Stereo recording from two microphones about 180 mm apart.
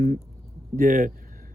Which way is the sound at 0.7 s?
50° right (ahead or behind).